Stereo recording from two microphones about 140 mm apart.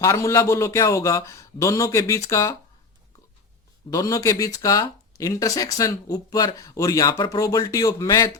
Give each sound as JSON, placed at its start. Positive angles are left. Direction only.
{"t": 0.0, "sound": "speech", "side_deg": 20}
{"t": 3.8, "sound": "speech", "side_deg": 25}